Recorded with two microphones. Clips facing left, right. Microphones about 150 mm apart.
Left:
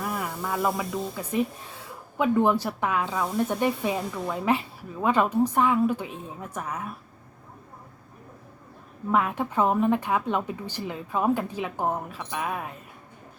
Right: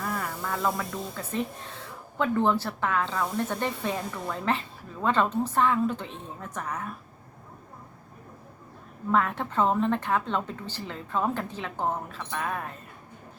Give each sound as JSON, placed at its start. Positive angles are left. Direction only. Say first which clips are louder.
{"t": 0.0, "sound": "speech", "louder": "left 2 dB", "side_deg": 10}
{"t": 9.1, "sound": "speech", "louder": "left 1 dB", "side_deg": 10}